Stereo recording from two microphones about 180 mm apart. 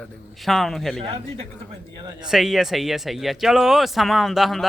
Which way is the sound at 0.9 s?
35° right (ahead or behind).